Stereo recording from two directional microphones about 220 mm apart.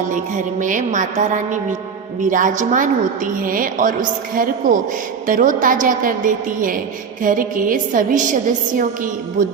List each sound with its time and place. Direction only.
0.6 s a woman's voice: 35° right (ahead or behind)